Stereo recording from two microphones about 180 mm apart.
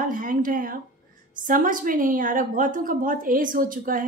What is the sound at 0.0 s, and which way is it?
A woman's voice, 50° right (ahead or behind).